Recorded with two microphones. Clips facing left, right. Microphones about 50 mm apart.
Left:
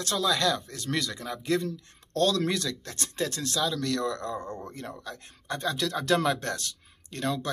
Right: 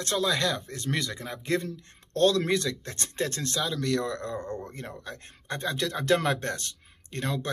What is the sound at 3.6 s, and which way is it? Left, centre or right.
Speech, right.